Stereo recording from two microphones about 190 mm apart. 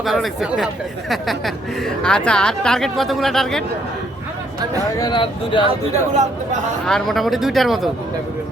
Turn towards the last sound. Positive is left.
turn(degrees=0)  # may be behind; listen again after turning